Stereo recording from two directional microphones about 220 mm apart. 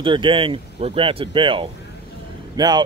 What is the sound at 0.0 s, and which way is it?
Speech, 20° right (ahead or behind).